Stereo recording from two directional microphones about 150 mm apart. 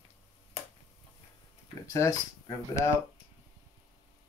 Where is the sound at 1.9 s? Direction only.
25° left (ahead or behind).